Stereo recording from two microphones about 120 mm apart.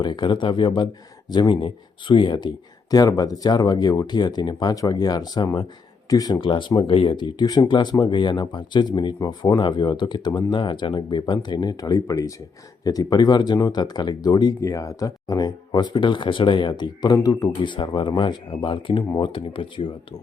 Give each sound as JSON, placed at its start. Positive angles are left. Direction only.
{"t": 0.0, "sound": "speech", "side_deg": 40}